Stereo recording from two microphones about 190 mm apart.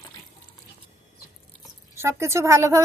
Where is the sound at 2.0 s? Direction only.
15° right (ahead or behind).